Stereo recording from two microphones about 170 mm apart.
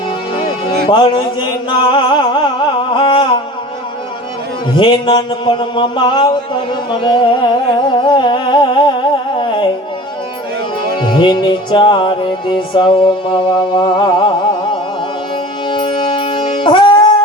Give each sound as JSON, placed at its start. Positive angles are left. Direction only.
{"t": 0.4, "sound": "music", "side_deg": 30}
{"t": 2.9, "sound": "a sound", "side_deg": 30}
{"t": 4.8, "sound": "music", "side_deg": 25}
{"t": 7.0, "sound": "humming", "side_deg": 30}
{"t": 10.9, "sound": "music", "side_deg": 30}